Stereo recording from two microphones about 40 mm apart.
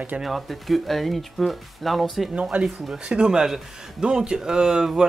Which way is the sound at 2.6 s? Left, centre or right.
Centre.